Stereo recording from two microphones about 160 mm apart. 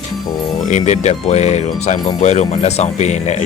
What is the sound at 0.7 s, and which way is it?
Speech, 45° left (ahead or behind).